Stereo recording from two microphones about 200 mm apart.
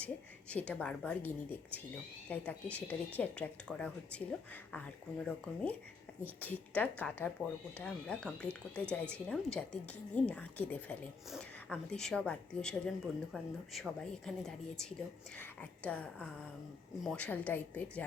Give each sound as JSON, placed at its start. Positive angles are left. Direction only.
{"t": 0.0, "sound": "speech", "side_deg": 5}